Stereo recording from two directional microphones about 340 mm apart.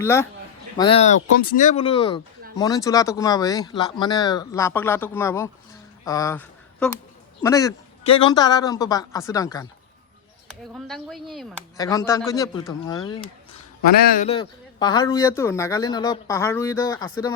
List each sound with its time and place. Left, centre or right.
0.0 s speech: centre
13.8 s speech: left; by 17.3 s centre